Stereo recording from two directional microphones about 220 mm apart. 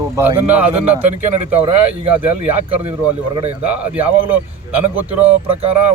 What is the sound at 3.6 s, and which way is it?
Speech, 5° right (ahead or behind).